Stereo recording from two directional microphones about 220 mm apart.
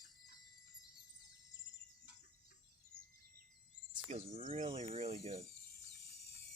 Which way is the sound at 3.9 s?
30° right (ahead or behind).